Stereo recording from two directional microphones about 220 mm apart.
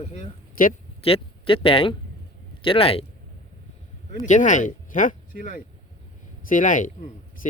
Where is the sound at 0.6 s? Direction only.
40° left (ahead or behind).